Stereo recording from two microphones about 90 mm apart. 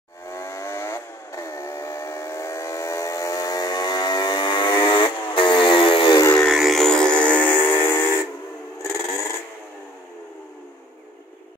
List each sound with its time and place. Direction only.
0.3 s vehicle: 30° left (ahead or behind); by 6.1 s 70° left (ahead or behind)
6.3 s music: centre (ahead or behind); by 8.1 s 25° left (ahead or behind)
8.9 s a sound: 30° left (ahead or behind)